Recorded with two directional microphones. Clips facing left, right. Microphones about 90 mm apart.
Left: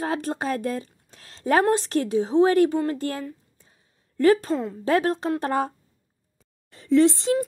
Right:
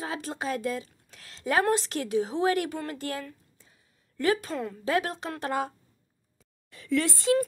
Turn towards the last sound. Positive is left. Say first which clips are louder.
# left 6 dB
turn(degrees=25)  # may be behind; listen again after turning